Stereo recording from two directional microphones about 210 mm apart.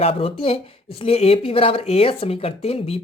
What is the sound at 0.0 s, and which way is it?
Speech, 25° left (ahead or behind).